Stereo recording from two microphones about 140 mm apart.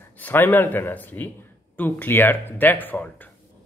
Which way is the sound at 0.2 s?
15° left (ahead or behind).